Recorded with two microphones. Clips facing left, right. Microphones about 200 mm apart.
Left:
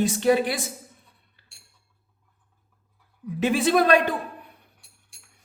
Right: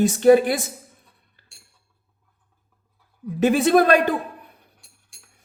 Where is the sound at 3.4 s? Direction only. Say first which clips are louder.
Right 4 dB; 45° right (ahead or behind).